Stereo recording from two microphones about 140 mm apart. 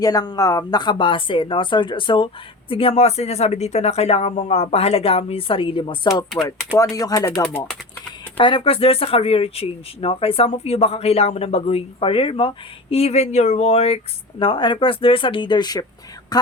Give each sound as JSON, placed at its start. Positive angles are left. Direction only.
{"t": 0.0, "sound": "speech", "side_deg": 25}
{"t": 8.4, "sound": "speech", "side_deg": 35}